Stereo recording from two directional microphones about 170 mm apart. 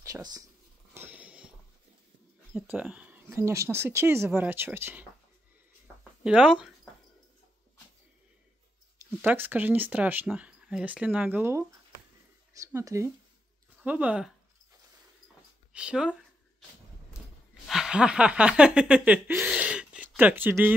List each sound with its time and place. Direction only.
0.0 s speech: 20° right (ahead or behind)
0.9 s a sound: 10° right (ahead or behind)
2.5 s speech: 5° right (ahead or behind)
6.2 s speech: 5° right (ahead or behind)
9.2 s speech: 10° right (ahead or behind)
15.7 s speech: 5° right (ahead or behind)
17.6 s a sound: 5° right (ahead or behind)